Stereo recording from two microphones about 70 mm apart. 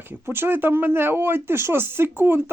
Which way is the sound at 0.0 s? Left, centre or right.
Right.